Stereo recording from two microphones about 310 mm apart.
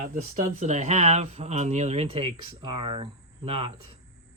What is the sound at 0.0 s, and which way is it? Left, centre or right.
Speech, right.